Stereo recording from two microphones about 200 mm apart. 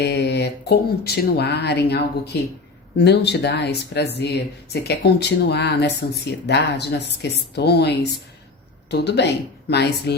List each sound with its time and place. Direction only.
0.0 s speech: 55° left (ahead or behind)